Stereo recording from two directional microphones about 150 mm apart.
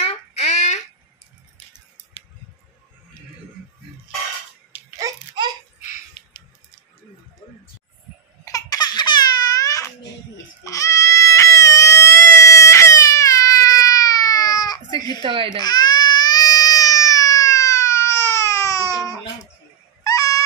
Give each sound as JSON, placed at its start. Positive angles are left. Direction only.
{"t": 0.0, "sound": "a sound", "side_deg": 45}
{"t": 4.9, "sound": "babbling", "side_deg": -25}
{"t": 6.2, "sound": "a sound", "side_deg": 30}
{"t": 8.5, "sound": "laughter", "side_deg": 25}
{"t": 10.6, "sound": "baby cry", "side_deg": 20}
{"t": 15.0, "sound": "a sound", "side_deg": 25}
{"t": 15.2, "sound": "baby cry", "side_deg": -35}
{"t": 15.6, "sound": "baby cry", "side_deg": 25}
{"t": 20.0, "sound": "cat", "side_deg": 25}